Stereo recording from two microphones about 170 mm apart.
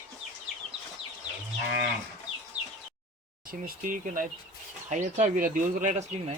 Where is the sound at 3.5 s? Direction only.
55° right (ahead or behind).